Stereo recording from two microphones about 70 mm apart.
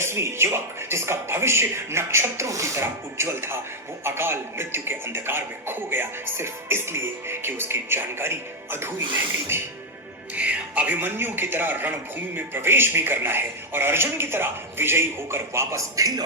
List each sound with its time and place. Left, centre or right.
0.0 s a man's voice: right
9.5 s a man's voice: right
10.3 s a man's voice: right
16.0 s speech: right